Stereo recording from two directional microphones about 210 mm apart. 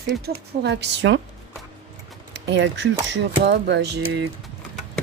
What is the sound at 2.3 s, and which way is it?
Speech, 55° right (ahead or behind).